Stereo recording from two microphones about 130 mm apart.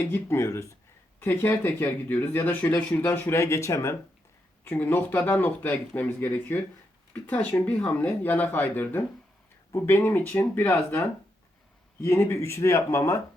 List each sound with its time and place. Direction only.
0.0 s speech: 20° left (ahead or behind)
12.0 s speech: 20° left (ahead or behind)